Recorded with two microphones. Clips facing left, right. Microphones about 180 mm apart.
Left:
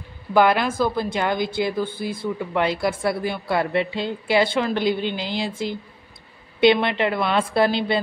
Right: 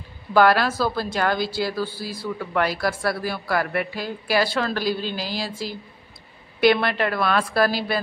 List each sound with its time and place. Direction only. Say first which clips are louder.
0.3 s a woman's voice: even; 20° left (ahead or behind)
6.6 s a woman's voice: left 2 dB; 20° left (ahead or behind)